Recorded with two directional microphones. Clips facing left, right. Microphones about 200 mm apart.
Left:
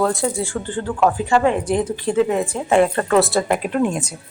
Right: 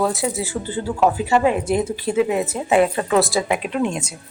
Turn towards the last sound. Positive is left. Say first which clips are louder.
# left 2 dB
turn(degrees=5)  # may be behind; listen again after turning